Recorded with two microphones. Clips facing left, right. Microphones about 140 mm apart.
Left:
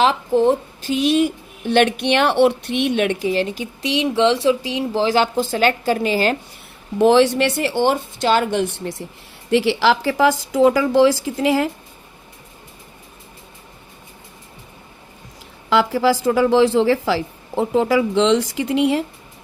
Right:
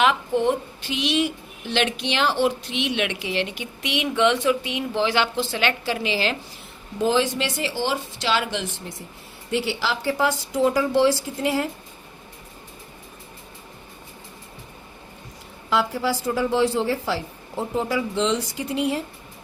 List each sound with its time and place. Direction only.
0.0 s a woman's voice: 35° left (ahead or behind)
7.0 s speech: 70° left (ahead or behind)
9.5 s speech: 90° left
15.7 s speech: 90° left